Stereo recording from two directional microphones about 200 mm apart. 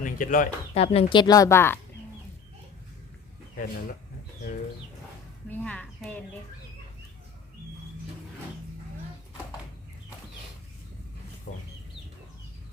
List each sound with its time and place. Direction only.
0.0 s bird: 40° left (ahead or behind)
0.7 s speech: 30° left (ahead or behind); by 1.8 s 10° left (ahead or behind)
5.5 s a sound: 5° left (ahead or behind)
11.5 s chicken: 45° left (ahead or behind)